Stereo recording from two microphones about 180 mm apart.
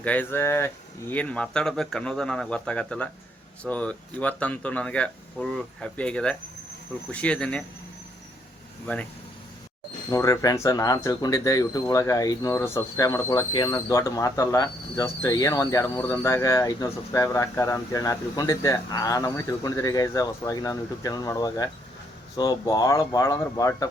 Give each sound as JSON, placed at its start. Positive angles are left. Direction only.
{"t": 0.0, "sound": "speech", "side_deg": 10}
{"t": 10.1, "sound": "speech", "side_deg": 15}